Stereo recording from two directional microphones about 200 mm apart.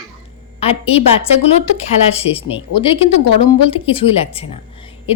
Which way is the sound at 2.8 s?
25° left (ahead or behind).